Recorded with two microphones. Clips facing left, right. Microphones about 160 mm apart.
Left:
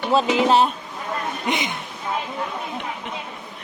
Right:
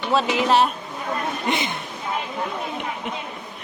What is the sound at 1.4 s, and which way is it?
Speech, 15° left (ahead or behind).